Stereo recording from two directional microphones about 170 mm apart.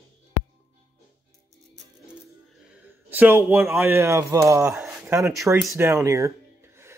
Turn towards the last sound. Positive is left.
turn(degrees=-15)  # may be behind; listen again after turning